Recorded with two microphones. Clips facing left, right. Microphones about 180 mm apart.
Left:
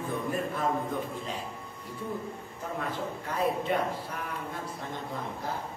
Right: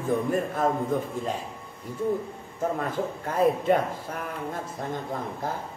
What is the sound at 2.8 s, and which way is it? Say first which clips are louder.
A man's voice: right 5 dB; 45° right (ahead or behind).